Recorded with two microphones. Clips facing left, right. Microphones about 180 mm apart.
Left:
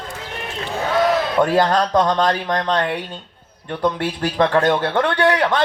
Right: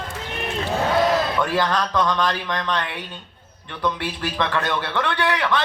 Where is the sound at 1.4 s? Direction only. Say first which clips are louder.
Left 5 dB; 45° left (ahead or behind).